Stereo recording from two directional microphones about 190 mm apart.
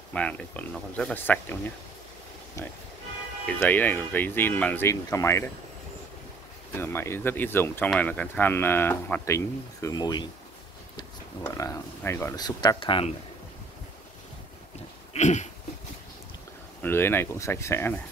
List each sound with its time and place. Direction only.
0.1 s speech: 5° left (ahead or behind)
3.5 s speech: 10° left (ahead or behind)
6.7 s speech: 10° left (ahead or behind)
15.1 s a sound: 40° left (ahead or behind)
16.8 s speech: 10° left (ahead or behind)